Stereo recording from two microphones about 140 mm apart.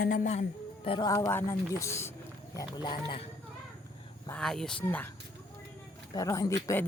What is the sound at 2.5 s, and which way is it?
Speech, 30° left (ahead or behind).